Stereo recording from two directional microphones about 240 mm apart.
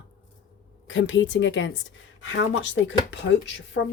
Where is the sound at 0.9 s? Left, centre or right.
Left.